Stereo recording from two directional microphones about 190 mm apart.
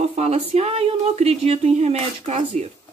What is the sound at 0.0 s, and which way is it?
Speech, 35° right (ahead or behind).